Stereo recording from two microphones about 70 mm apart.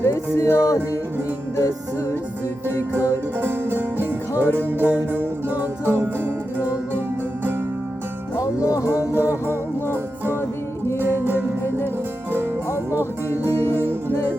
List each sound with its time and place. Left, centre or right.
0.3 s music: left
3.4 s music: right
8.4 s music: left
9.0 s music: right
12.3 s music: right